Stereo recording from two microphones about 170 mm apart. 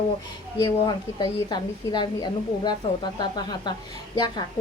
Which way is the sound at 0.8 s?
25° left (ahead or behind).